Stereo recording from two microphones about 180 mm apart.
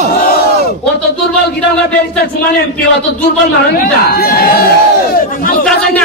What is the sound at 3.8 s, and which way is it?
Speech, 60° left (ahead or behind).